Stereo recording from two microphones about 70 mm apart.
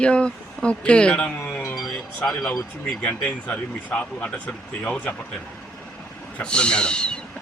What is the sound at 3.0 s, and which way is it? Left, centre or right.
Speech, left.